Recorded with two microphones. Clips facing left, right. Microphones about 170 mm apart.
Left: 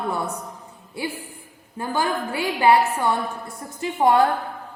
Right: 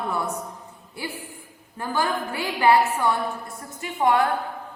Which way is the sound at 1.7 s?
20° left (ahead or behind).